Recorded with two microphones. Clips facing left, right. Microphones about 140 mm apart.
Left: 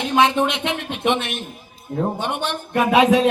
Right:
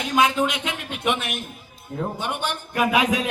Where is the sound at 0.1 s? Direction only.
25° left (ahead or behind).